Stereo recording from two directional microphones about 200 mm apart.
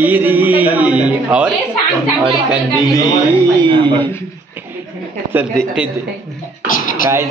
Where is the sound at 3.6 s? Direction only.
25° right (ahead or behind).